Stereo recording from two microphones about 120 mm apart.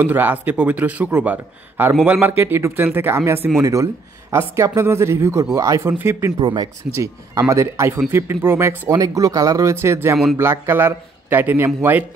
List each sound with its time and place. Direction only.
0.0 s a man's voice: 15° right (ahead or behind)
6.4 s speech: 40° right (ahead or behind)
7.0 s speech: 25° right (ahead or behind)